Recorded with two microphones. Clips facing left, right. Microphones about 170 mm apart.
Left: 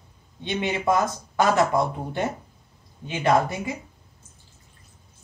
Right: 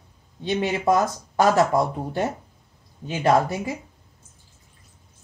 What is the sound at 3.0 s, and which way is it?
Speech, 40° right (ahead or behind).